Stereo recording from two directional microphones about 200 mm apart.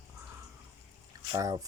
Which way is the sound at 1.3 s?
15° right (ahead or behind).